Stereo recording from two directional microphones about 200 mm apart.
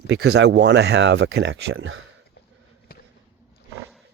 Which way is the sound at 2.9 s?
50° left (ahead or behind).